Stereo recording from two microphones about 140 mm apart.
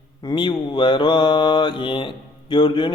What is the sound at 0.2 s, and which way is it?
Mantra, 35° left (ahead or behind).